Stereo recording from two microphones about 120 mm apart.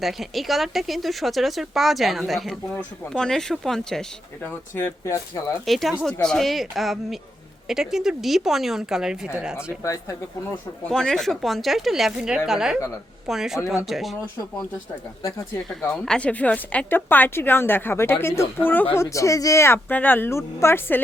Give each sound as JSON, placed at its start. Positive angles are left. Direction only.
{"t": 0.0, "sound": "speech", "side_deg": 0}
{"t": 4.4, "sound": "speech", "side_deg": 20}
{"t": 5.6, "sound": "speech", "side_deg": 0}
{"t": 9.8, "sound": "speech", "side_deg": 25}
{"t": 10.8, "sound": "speech", "side_deg": 5}
{"t": 15.9, "sound": "speech", "side_deg": 10}